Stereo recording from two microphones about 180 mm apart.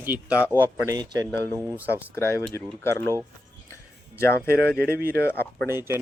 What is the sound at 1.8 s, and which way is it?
Speech, 10° right (ahead or behind).